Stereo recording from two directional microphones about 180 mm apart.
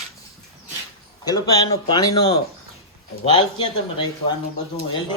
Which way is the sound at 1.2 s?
20° left (ahead or behind).